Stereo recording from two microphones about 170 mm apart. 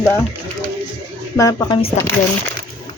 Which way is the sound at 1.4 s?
20° left (ahead or behind).